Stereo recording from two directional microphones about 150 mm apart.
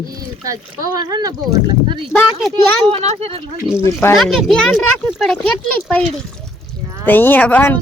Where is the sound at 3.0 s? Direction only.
45° right (ahead or behind).